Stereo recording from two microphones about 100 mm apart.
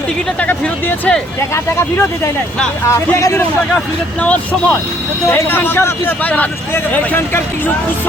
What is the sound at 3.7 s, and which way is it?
Speech, 10° left (ahead or behind).